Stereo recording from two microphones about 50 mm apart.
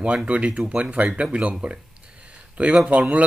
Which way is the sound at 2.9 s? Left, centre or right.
Right.